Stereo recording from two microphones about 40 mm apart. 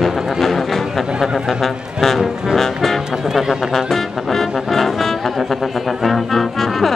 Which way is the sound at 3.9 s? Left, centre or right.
Centre.